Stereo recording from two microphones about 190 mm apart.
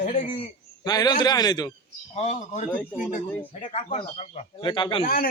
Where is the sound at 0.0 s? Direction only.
40° left (ahead or behind).